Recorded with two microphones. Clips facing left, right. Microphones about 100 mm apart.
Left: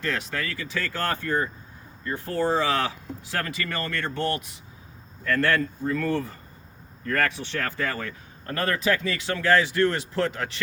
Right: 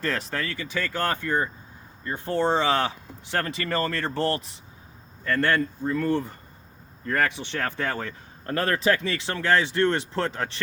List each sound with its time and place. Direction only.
0.0 s speech: 35° right (ahead or behind)
5.3 s speech: 20° right (ahead or behind)